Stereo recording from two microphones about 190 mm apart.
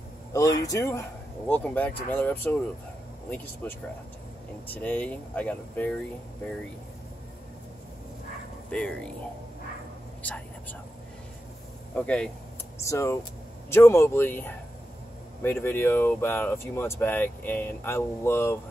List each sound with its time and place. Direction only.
0.3 s speech: 20° left (ahead or behind)
3.6 s speech: 10° left (ahead or behind)
8.6 s speech: 5° left (ahead or behind)
10.2 s whispering: 10° left (ahead or behind)
11.9 s speech: 5° left (ahead or behind)